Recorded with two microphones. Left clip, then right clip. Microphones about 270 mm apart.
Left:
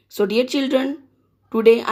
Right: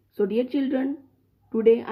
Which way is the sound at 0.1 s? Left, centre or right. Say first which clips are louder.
Left 5 dB; centre.